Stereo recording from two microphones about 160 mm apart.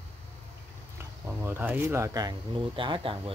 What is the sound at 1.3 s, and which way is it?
Speech, 15° right (ahead or behind).